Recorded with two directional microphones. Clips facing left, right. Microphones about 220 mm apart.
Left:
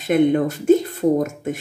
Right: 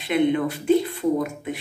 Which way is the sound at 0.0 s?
45° left (ahead or behind).